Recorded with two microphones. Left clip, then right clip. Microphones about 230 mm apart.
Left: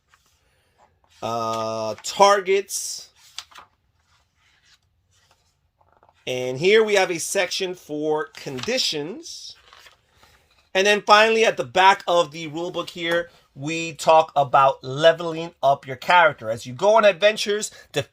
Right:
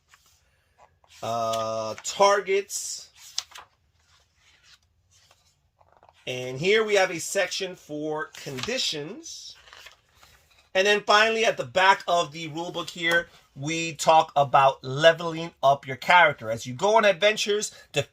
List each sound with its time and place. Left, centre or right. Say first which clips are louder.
1.2 s speech: left 2 dB; left
3.3 s a sound: right 4 dB; centre
6.2 s speech: left 5 dB; left
10.7 s speech: left 4 dB; left
13.0 s speech: right 1 dB; left